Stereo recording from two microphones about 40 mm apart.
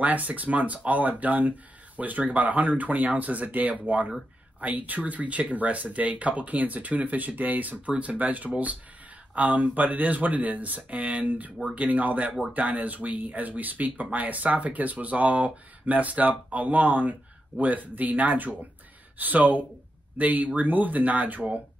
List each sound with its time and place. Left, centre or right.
0.0 s speech: right